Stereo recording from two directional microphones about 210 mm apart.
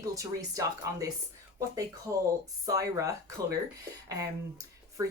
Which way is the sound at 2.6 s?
15° right (ahead or behind).